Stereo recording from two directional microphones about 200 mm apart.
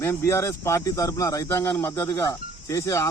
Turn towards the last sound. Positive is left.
turn(degrees=15)  # may be behind; listen again after turning